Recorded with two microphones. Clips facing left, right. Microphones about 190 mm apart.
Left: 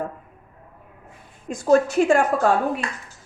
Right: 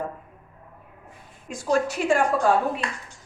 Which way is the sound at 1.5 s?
45° left (ahead or behind).